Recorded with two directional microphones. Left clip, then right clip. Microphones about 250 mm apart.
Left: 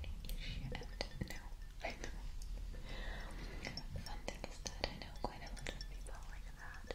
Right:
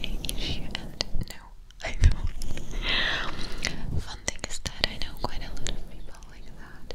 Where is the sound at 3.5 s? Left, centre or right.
Right.